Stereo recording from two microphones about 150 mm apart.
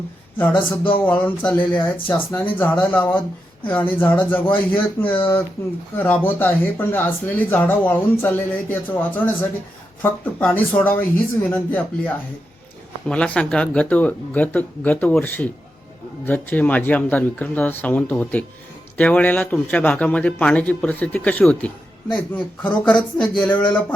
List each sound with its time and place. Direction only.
0.3 s speech: 10° left (ahead or behind)
23.1 s speech: 30° left (ahead or behind)
23.4 s speech: 10° left (ahead or behind)